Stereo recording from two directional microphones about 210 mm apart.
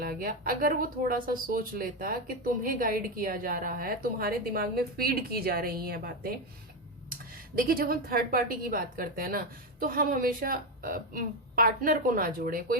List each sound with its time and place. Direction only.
0.0 s speech: 45° right (ahead or behind)
7.5 s speech: 45° right (ahead or behind)